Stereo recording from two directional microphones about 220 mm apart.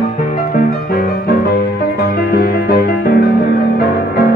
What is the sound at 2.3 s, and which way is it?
Music, 50° left (ahead or behind).